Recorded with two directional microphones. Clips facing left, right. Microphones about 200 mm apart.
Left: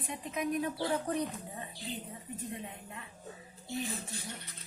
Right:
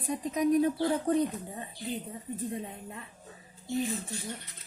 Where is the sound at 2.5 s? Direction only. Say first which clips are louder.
Right 5 dB; 30° right (ahead or behind).